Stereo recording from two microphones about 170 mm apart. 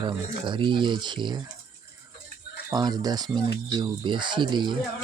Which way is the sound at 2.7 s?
25° right (ahead or behind).